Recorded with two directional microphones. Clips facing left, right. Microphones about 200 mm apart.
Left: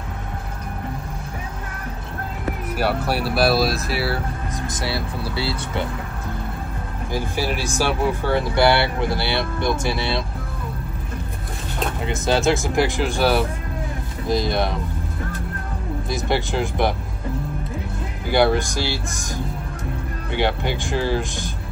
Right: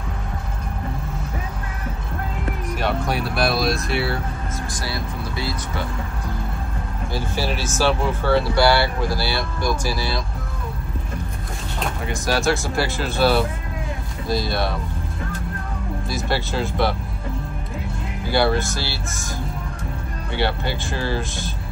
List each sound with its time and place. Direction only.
2.8 s speech: 5° left (ahead or behind)
4.7 s speech: 30° left (ahead or behind)
7.1 s speech: 15° left (ahead or behind)
12.1 s speech: 20° left (ahead or behind)
16.1 s speech: 20° left (ahead or behind)
18.3 s speech: 15° left (ahead or behind)